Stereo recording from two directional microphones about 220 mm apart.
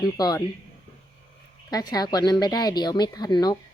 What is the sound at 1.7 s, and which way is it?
Speech, 15° left (ahead or behind).